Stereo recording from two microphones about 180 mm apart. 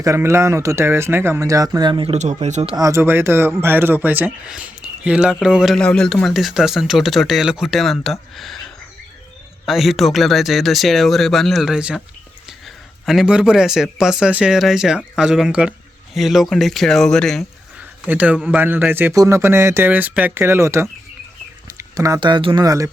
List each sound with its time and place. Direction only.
0.0 s speech: 15° right (ahead or behind)
2.1 s speech: 40° right (ahead or behind)
2.7 s speech: 15° right (ahead or behind); by 17.4 s 5° left (ahead or behind)
17.7 s a sound: 5° right (ahead or behind)
18.5 s speech: 10° right (ahead or behind)